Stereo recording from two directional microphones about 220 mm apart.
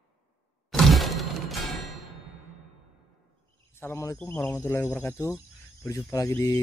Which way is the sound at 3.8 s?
15° left (ahead or behind).